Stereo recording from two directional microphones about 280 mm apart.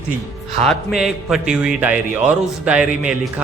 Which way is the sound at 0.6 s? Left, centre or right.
Centre.